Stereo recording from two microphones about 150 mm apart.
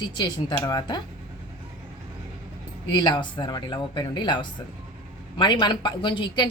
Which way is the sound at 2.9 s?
30° left (ahead or behind).